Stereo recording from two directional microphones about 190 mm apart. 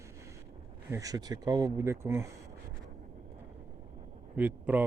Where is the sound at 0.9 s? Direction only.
20° right (ahead or behind).